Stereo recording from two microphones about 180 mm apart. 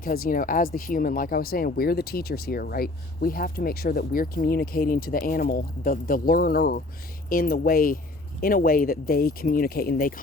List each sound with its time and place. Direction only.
0.0 s speech: 55° left (ahead or behind)